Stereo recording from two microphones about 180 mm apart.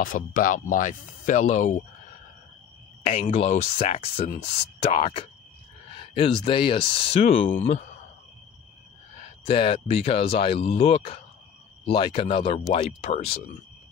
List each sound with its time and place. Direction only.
0.0 s speech: 50° left (ahead or behind)
3.1 s speech: 35° left (ahead or behind)
9.5 s speech: 35° left (ahead or behind)